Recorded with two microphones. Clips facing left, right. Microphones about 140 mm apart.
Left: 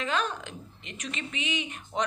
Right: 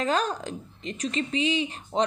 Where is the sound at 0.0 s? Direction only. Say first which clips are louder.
Right 4 dB; 40° right (ahead or behind).